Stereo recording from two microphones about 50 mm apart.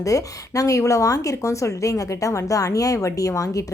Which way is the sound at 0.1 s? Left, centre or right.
Left.